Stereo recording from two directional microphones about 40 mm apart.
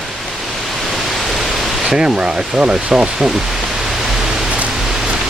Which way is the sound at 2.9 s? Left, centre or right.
Centre.